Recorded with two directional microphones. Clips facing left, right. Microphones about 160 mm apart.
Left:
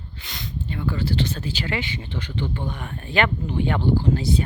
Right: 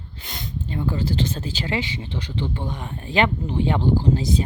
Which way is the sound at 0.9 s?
25° right (ahead or behind).